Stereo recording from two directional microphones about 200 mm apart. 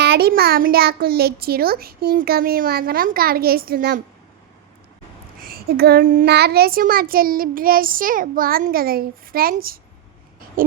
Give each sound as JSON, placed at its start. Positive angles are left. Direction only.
{"t": 0.0, "sound": "a child's voice", "side_deg": -50}
{"t": 5.4, "sound": "a child's voice", "side_deg": -50}